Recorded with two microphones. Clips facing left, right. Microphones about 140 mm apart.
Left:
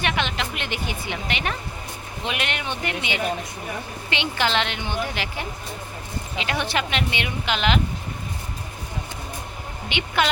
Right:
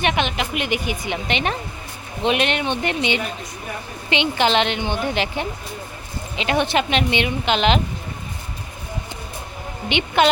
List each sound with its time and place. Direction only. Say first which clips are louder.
0.0 s a woman's voice: right 4 dB; 20° right (ahead or behind)
9.9 s a woman's voice: right 6 dB; 20° right (ahead or behind)